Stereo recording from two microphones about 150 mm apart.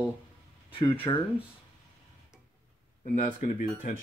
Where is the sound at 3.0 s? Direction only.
60° left (ahead or behind).